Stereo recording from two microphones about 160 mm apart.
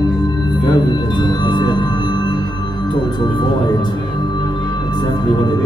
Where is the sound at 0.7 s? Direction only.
30° left (ahead or behind).